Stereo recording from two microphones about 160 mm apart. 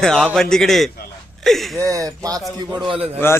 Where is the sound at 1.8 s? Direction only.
20° right (ahead or behind).